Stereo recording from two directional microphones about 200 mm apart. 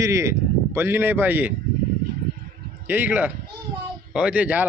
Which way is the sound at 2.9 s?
10° right (ahead or behind).